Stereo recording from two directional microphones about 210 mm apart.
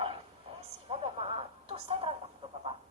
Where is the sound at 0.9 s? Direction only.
30° right (ahead or behind).